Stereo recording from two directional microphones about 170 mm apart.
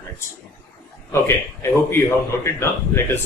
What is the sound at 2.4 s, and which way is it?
Speech, 15° left (ahead or behind).